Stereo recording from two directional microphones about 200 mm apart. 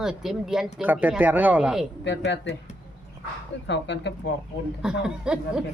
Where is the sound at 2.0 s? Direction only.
60° left (ahead or behind).